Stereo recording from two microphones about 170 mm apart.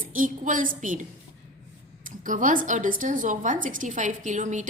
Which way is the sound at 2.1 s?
50° right (ahead or behind).